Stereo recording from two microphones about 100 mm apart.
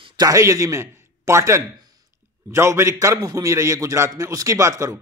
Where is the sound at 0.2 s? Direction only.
35° right (ahead or behind).